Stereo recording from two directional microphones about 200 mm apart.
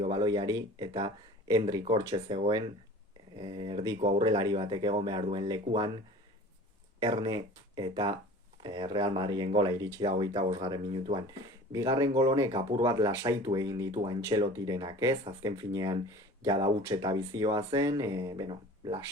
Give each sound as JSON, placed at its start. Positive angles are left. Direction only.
{"t": 0.0, "sound": "speech", "side_deg": -20}
{"t": 7.0, "sound": "speech", "side_deg": -25}